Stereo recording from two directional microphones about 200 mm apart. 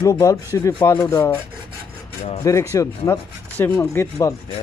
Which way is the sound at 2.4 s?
15° left (ahead or behind).